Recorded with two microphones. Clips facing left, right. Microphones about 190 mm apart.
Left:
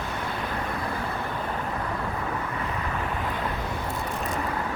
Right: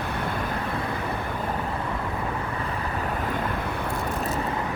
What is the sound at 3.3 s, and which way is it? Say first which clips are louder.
Vehicle: right 2 dB; 55° right (ahead or behind).